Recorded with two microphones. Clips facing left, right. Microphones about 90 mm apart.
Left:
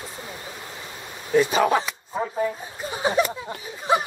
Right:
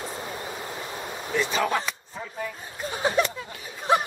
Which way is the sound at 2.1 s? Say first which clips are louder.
Left 14 dB; 40° left (ahead or behind).